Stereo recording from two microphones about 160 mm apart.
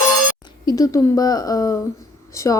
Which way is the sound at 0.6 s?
20° left (ahead or behind).